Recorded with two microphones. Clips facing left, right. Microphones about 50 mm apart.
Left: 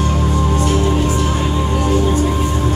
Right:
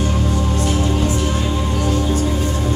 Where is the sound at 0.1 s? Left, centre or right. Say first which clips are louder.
Left 3 dB; left.